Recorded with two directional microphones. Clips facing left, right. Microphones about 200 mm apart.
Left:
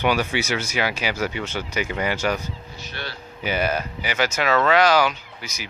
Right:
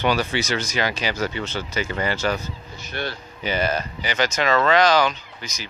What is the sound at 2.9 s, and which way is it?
Speech, 50° right (ahead or behind).